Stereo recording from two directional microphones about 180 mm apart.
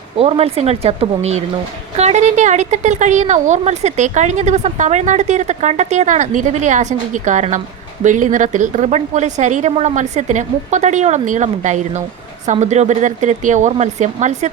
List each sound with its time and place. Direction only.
0.2 s speech: 30° right (ahead or behind)